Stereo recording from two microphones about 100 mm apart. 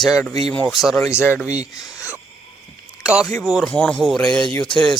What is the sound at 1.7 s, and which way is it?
Speech, 35° left (ahead or behind).